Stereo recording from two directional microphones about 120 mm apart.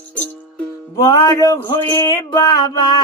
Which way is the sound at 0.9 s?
30° left (ahead or behind).